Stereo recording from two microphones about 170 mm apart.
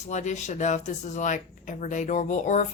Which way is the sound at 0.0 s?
45° left (ahead or behind).